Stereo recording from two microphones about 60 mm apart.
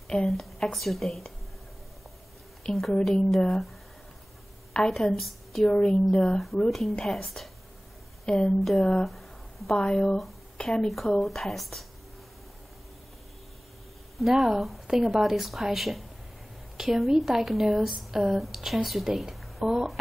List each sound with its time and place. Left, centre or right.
0.1 s speech: centre
2.7 s speech: centre
4.7 s a woman's voice: centre
5.7 s a woman's voice: centre
6.3 s a woman's voice: centre
8.5 s speech: centre
9.0 s a sound: centre
9.8 s a woman's voice: centre
14.1 s speech: centre